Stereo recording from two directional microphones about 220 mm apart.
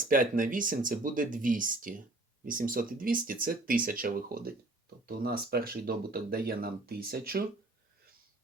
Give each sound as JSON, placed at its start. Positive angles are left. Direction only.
{"t": 0.0, "sound": "speech", "side_deg": -40}